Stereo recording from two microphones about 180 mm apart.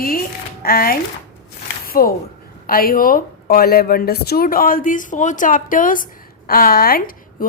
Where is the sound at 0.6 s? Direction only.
55° left (ahead or behind).